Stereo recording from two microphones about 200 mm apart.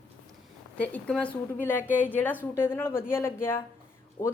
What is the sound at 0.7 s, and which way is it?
Speech, 5° left (ahead or behind).